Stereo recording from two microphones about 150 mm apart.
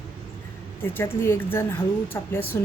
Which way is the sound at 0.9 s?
15° left (ahead or behind).